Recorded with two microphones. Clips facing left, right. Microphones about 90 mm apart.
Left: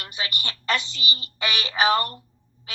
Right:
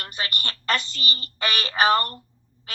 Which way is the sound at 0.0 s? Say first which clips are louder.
Right 1 dB; 45° right (ahead or behind).